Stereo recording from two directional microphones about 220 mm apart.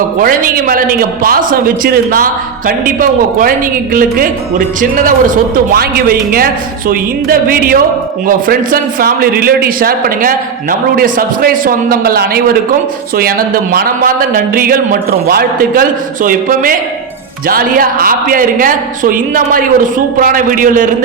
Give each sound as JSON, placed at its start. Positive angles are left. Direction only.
{"t": 0.2, "sound": "a man's voice", "side_deg": -40}